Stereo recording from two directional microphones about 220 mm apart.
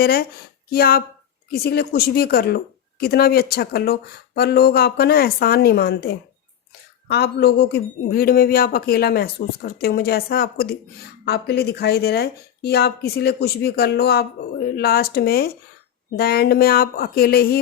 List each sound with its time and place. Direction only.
0.0 s speech: 45° left (ahead or behind)
7.1 s speech: 50° left (ahead or behind)